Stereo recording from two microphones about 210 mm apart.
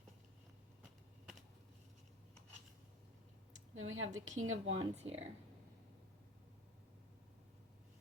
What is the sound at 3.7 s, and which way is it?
Speech, 70° right (ahead or behind).